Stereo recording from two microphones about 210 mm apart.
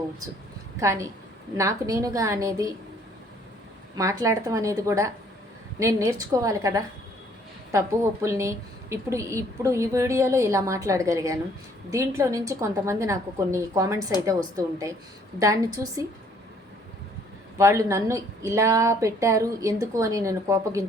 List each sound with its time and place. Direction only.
0.8 s a woman's voice: 15° right (ahead or behind)
3.9 s a woman's voice: 15° right (ahead or behind)
17.6 s a woman's voice: 15° right (ahead or behind)